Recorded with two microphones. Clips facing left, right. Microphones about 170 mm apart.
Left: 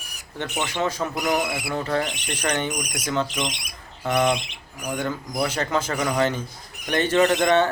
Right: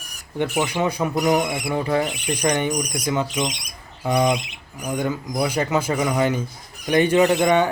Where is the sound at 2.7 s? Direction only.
30° right (ahead or behind).